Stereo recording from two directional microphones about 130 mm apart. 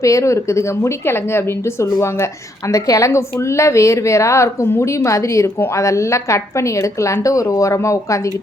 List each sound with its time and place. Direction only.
0.0 s a woman's voice: 25° left (ahead or behind)
2.7 s a woman's voice: 25° left (ahead or behind)